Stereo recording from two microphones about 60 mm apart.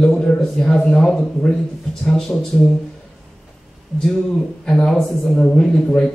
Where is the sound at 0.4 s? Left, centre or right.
Centre.